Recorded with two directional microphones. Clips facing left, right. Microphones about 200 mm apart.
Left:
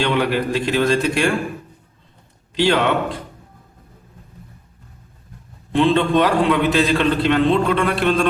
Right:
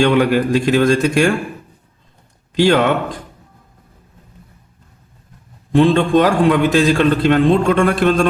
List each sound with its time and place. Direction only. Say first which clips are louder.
0.0 s a man's voice: right 6 dB; 45° right (ahead or behind)
2.6 s a man's voice: right 4 dB; 45° right (ahead or behind)
5.7 s a man's voice: right 4 dB; 45° right (ahead or behind)